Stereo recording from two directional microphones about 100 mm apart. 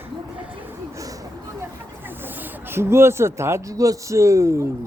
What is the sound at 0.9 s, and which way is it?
Vehicle, 35° right (ahead or behind).